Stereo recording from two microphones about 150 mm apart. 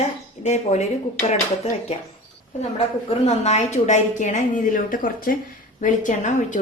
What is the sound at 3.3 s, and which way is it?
A woman's voice, 45° left (ahead or behind).